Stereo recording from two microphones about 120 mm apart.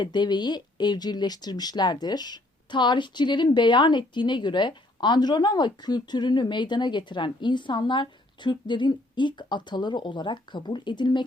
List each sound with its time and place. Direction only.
0.0 s speech: 40° left (ahead or behind)